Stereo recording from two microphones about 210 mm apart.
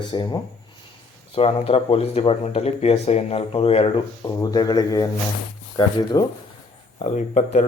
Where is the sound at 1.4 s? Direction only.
30° left (ahead or behind).